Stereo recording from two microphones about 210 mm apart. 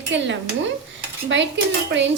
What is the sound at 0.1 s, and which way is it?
Speech, 60° right (ahead or behind).